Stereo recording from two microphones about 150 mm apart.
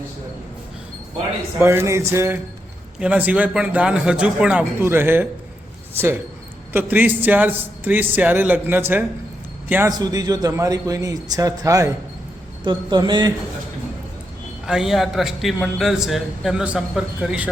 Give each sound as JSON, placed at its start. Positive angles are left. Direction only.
{"t": 1.5, "sound": "a man's voice", "side_deg": -15}
{"t": 6.7, "sound": "a man's voice", "side_deg": -10}
{"t": 10.0, "sound": "a man's voice", "side_deg": -25}
{"t": 14.7, "sound": "a man's voice", "side_deg": -5}